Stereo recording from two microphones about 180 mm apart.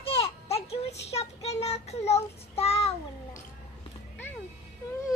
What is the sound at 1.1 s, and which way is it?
Child singing, 35° left (ahead or behind).